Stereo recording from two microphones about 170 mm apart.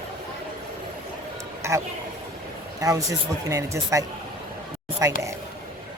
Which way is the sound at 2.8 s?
20° right (ahead or behind).